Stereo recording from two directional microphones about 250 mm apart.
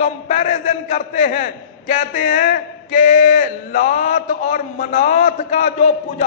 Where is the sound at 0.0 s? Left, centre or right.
Left.